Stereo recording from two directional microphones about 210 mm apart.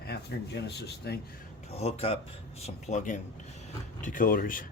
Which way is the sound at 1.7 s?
30° left (ahead or behind).